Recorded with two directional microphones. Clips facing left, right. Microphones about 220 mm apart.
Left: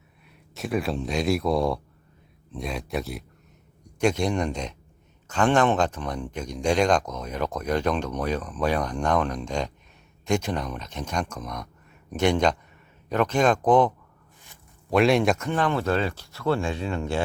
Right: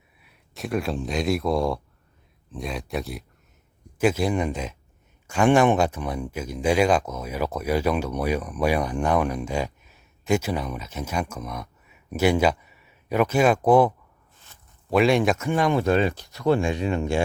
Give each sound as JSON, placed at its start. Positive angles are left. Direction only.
{"t": 0.3, "sound": "speech", "side_deg": 0}
{"t": 15.4, "sound": "speech", "side_deg": -10}